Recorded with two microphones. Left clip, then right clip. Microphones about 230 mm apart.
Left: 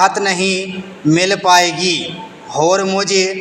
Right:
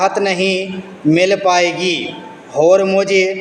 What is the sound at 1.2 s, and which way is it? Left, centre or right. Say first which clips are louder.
A man's voice: left 2 dB; left.